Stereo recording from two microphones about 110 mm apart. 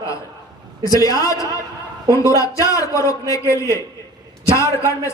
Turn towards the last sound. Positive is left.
turn(degrees=25)  # may be behind; listen again after turning